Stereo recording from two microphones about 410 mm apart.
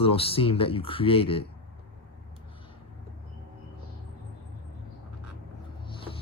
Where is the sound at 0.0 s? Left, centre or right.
Centre.